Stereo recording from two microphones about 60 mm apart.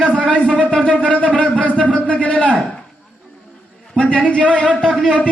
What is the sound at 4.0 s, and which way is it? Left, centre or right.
Speech, left.